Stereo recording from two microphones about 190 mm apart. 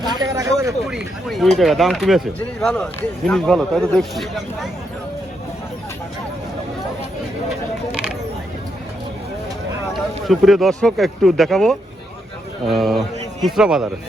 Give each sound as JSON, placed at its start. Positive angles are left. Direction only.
{"t": 0.0, "sound": "speech", "side_deg": -20}
{"t": 0.9, "sound": "speech", "side_deg": 0}
{"t": 10.2, "sound": "a man's voice", "side_deg": 0}